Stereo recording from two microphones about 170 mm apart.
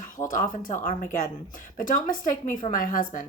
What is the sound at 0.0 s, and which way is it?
A woman's voice, 50° left (ahead or behind).